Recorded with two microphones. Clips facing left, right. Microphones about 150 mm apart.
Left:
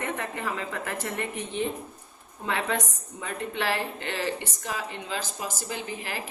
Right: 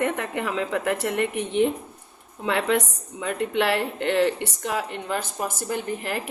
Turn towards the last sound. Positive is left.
turn(degrees=-55)  # may be behind; listen again after turning